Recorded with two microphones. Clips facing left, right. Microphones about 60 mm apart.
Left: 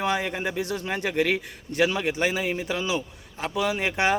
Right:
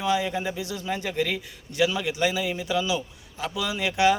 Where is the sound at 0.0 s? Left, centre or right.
Left.